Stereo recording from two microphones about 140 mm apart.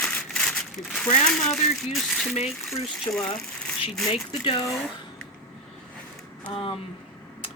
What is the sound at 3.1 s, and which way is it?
Speech, 20° left (ahead or behind).